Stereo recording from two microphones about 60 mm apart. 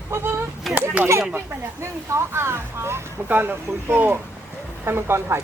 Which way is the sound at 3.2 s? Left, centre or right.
Right.